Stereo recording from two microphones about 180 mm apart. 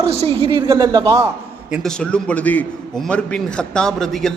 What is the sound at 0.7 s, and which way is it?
Speech, 15° right (ahead or behind).